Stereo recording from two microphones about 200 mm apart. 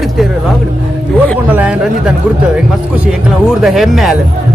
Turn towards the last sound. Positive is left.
turn(degrees=0)  # may be behind; listen again after turning